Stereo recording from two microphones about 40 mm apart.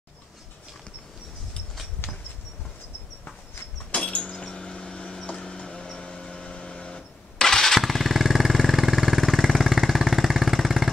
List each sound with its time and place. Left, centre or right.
3.9 s a sound: left
7.4 s jackhammer: centre
7.8 s vehicle: centre